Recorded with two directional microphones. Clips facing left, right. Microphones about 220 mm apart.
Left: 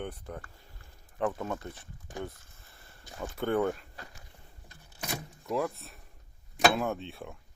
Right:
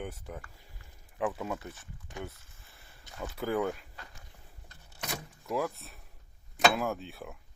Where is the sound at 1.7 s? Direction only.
30° left (ahead or behind).